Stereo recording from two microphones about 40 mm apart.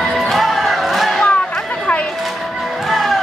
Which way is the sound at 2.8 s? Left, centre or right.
Centre.